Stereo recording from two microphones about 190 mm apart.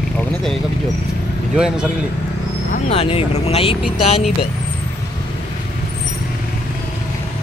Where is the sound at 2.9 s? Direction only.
30° left (ahead or behind).